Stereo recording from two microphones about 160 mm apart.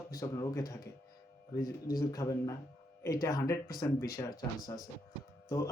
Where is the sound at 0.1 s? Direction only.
20° left (ahead or behind).